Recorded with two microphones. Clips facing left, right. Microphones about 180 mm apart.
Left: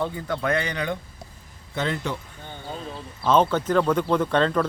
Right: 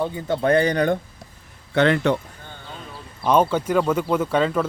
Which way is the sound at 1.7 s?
70° right (ahead or behind).